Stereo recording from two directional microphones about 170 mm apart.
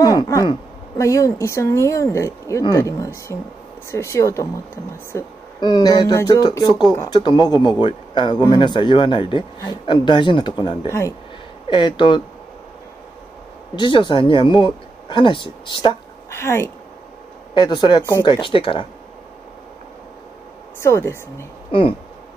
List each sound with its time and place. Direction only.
0.0 s a woman's voice: 20° left (ahead or behind)
5.6 s speech: 25° left (ahead or behind)
10.9 s speech: 15° left (ahead or behind)
11.7 s speech: 30° left (ahead or behind)
13.7 s speech: 30° left (ahead or behind)
16.3 s a woman's voice: 15° left (ahead or behind)
17.6 s speech: 25° left (ahead or behind)
20.8 s speech: 15° left (ahead or behind)
21.7 s a sound: 30° left (ahead or behind)